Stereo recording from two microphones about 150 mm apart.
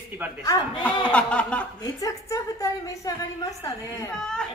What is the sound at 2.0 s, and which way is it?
A woman's voice, 20° left (ahead or behind).